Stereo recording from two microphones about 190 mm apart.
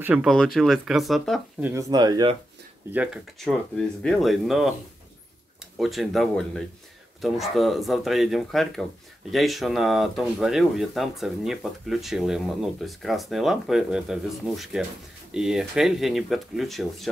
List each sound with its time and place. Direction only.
0.0 s speech: 5° right (ahead or behind)
1.7 s speech: 20° right (ahead or behind)
2.9 s speech: 5° right (ahead or behind)
5.8 s speech: centre (ahead or behind)